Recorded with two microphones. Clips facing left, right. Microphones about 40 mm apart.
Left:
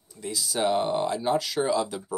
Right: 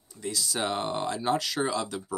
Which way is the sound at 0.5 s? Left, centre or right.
Centre.